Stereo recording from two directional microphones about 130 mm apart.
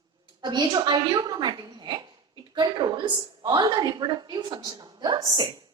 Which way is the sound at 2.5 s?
35° right (ahead or behind).